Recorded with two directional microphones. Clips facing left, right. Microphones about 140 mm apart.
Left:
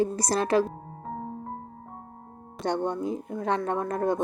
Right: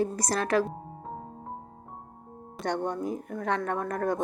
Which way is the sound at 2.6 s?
Centre (ahead or behind).